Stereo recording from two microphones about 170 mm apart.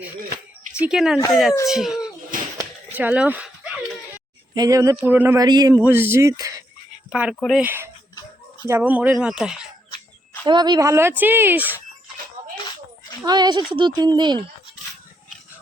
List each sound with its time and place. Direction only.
0.8 s a child's voice: 5° right (ahead or behind)
4.5 s speech: 20° right (ahead or behind)
5.4 s speech: 25° right (ahead or behind)
5.7 s speech: 15° right (ahead or behind)
7.1 s speech: 5° right (ahead or behind)
7.6 s speech: 10° right (ahead or behind)
10.4 s speech: 25° right (ahead or behind); by 11.8 s 10° right (ahead or behind)
13.2 s speech: 25° right (ahead or behind)